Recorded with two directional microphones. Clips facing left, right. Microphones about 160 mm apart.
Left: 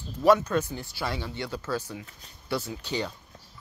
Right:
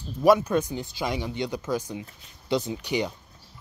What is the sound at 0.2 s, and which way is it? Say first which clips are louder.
Speech: right 2 dB; 10° right (ahead or behind).